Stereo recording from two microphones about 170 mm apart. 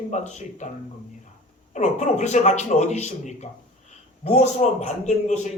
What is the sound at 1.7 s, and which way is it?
A man's voice, 45° left (ahead or behind).